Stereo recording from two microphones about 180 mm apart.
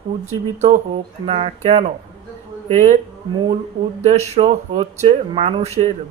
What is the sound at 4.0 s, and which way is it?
Speech, 40° right (ahead or behind).